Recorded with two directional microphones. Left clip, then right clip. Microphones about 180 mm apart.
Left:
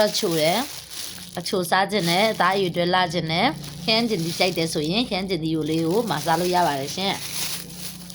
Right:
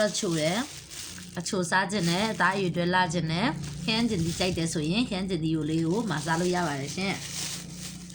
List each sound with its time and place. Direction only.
0.0 s speech: 20° right (ahead or behind)